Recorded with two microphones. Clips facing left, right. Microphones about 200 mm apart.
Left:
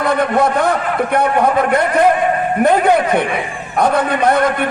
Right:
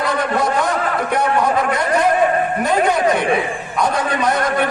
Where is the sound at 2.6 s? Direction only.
55° left (ahead or behind).